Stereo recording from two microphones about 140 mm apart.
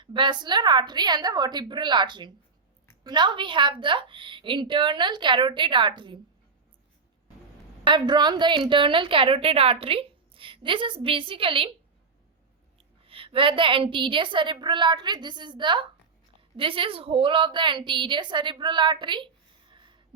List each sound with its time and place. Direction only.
0.0 s a woman's voice: 35° right (ahead or behind)
7.9 s a woman's voice: 35° right (ahead or behind)
13.1 s a woman's voice: 40° right (ahead or behind)